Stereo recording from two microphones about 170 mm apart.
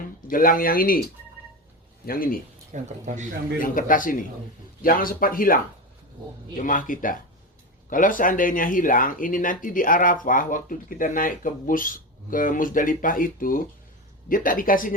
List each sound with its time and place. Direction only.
0.3 s speech: 55° left (ahead or behind)
2.0 s speech: 55° left (ahead or behind)
2.7 s speech: 45° right (ahead or behind)
3.6 s speech: 50° left (ahead or behind)
6.6 s speech: 50° left (ahead or behind)